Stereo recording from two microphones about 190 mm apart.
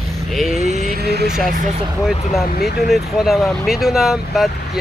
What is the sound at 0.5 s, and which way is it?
Vehicle, 35° right (ahead or behind).